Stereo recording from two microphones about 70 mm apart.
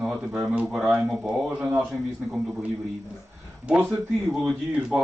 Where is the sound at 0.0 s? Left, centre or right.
Centre.